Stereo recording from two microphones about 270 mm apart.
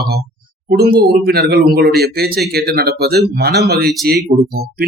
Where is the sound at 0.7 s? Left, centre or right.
Right.